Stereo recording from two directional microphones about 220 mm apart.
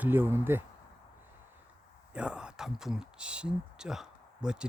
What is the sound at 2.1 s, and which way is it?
Speech, 5° right (ahead or behind).